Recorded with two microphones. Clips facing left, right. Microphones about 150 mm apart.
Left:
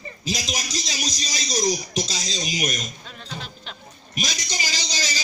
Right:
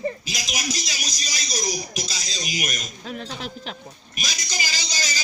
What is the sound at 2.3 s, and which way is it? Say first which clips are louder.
Speech: left 3 dB; 35° left (ahead or behind).